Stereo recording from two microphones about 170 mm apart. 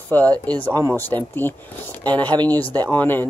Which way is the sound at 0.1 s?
10° left (ahead or behind).